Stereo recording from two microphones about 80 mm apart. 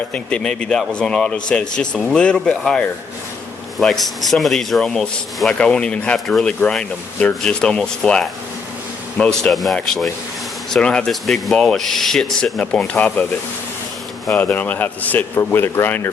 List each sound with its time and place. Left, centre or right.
0.1 s a man's voice: centre
6.1 s speech: centre
9.4 s a man's voice: centre; by 13.2 s left
14.3 s speech: centre